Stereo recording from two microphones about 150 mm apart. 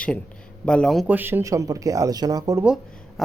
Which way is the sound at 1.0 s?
10° right (ahead or behind).